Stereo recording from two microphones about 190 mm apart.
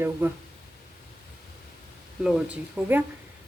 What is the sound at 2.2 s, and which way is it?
Speech, centre (ahead or behind).